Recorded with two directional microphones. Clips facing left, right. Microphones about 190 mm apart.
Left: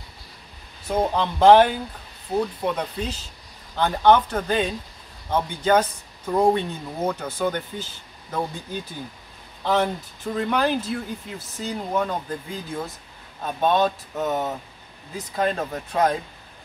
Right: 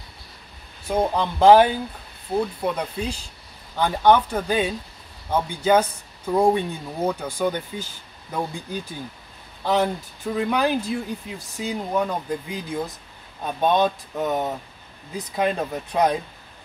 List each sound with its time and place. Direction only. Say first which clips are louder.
0.8 s speech: even; 5° right (ahead or behind)
15.1 s speech: right 1 dB; 15° right (ahead or behind)
15.5 s speech: right 1 dB; centre (ahead or behind)
15.9 s speech: right 1 dB; 15° right (ahead or behind)